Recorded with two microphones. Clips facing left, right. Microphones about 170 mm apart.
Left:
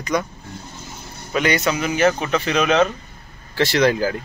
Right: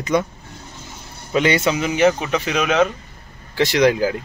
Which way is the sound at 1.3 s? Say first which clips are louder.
Right 2 dB; 25° right (ahead or behind).